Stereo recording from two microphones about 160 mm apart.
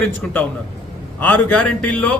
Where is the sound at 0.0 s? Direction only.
10° left (ahead or behind).